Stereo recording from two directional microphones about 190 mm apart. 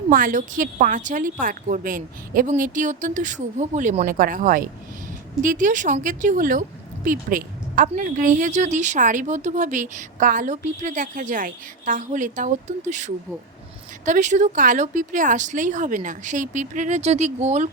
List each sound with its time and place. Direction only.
0.1 s speech: 45° right (ahead or behind)